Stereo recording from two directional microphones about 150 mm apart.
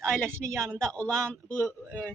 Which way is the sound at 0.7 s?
5° left (ahead or behind).